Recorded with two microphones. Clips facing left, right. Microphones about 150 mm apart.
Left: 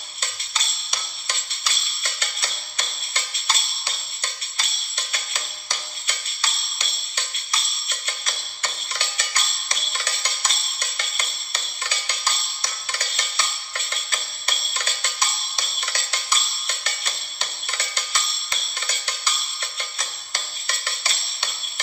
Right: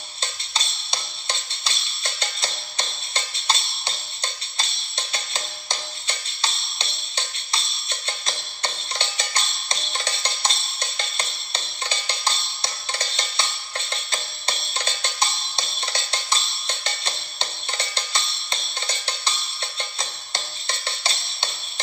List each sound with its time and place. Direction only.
0.2 s music: 30° right (ahead or behind)